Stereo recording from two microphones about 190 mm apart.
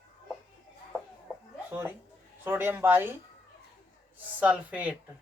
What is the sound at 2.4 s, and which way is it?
Speech, 10° right (ahead or behind).